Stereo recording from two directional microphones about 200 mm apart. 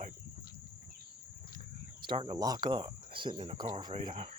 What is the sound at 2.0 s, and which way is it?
Speech, 25° right (ahead or behind).